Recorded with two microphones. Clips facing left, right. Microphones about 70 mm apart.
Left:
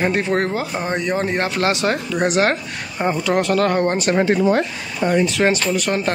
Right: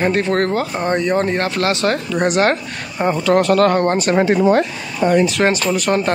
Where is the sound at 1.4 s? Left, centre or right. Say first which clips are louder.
Right 1 dB; left.